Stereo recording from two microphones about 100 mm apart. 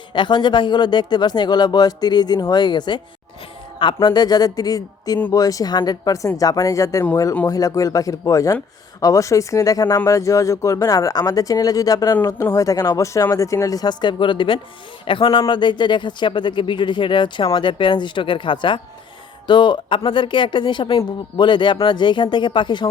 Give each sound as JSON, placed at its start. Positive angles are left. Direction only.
{"t": 0.1, "sound": "speech", "side_deg": 50}
{"t": 12.4, "sound": "speech", "side_deg": 30}